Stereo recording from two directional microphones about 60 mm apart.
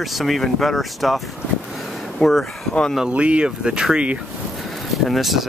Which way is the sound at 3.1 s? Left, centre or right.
Centre.